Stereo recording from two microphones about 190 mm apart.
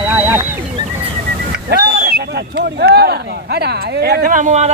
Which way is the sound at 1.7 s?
55° right (ahead or behind).